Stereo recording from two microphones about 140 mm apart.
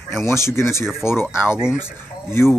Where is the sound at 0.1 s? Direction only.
20° left (ahead or behind).